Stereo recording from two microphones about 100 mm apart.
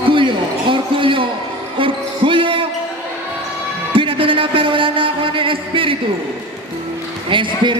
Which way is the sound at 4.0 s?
60° right (ahead or behind).